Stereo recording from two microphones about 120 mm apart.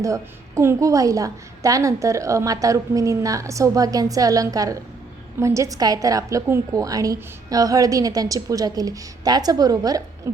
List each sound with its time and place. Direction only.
0.0 s a woman's voice: 25° right (ahead or behind)